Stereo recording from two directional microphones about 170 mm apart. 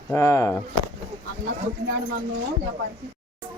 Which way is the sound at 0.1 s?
20° left (ahead or behind).